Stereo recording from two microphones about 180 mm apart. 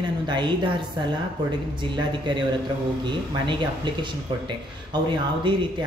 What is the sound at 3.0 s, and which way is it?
Speech, 25° right (ahead or behind).